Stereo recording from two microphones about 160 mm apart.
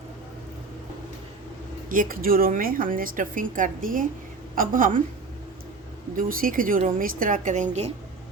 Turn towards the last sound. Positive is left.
turn(degrees=-45)  # may be behind; listen again after turning